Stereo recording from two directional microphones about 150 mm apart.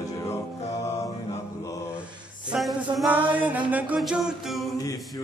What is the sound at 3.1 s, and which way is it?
Music, 10° right (ahead or behind).